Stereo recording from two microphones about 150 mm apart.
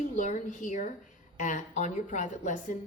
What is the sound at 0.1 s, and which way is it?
A woman's voice, 55° left (ahead or behind).